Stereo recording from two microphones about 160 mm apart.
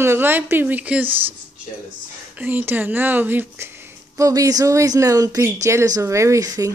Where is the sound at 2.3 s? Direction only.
10° right (ahead or behind).